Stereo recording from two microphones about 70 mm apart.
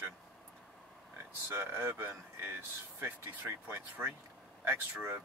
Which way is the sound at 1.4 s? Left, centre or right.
Right.